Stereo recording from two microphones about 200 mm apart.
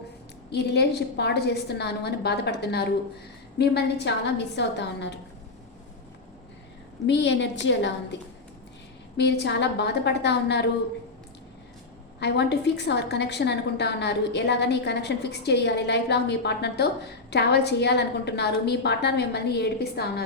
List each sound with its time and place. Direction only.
0.5 s a woman's voice: 55° left (ahead or behind)
7.1 s a woman's voice: 60° left (ahead or behind)
9.1 s a woman's voice: 55° left (ahead or behind)
12.2 s a woman's voice: 55° left (ahead or behind)